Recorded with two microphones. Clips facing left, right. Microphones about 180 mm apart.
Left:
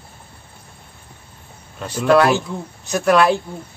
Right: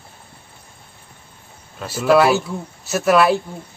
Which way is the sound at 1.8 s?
5° right (ahead or behind).